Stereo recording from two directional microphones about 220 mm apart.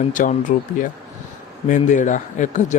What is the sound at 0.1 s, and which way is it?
Speech, 35° left (ahead or behind).